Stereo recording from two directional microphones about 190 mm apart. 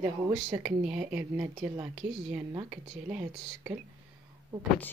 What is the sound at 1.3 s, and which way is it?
Speech, 25° right (ahead or behind).